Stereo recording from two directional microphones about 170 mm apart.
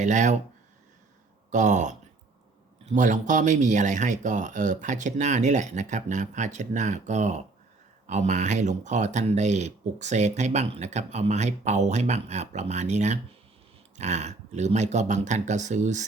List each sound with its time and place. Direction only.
0.0 s speech: 45° right (ahead or behind)
1.5 s speech: 45° right (ahead or behind)